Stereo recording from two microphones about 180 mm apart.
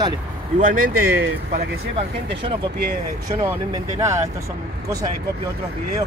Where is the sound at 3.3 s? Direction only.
20° right (ahead or behind).